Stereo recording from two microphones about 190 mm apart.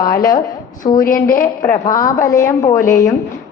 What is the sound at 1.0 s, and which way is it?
Speech, 50° left (ahead or behind).